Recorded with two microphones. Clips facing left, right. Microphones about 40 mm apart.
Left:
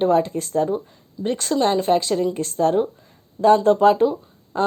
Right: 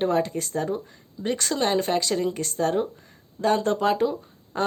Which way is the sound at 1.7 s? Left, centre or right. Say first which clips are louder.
Left 5 dB; centre.